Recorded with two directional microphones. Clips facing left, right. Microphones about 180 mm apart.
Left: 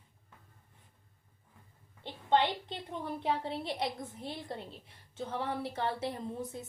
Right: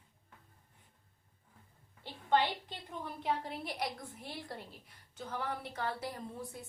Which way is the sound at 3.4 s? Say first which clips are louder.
Left 4 dB; 25° left (ahead or behind).